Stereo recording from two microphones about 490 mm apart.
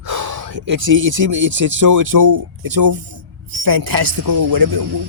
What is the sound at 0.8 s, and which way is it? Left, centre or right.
Speech, right.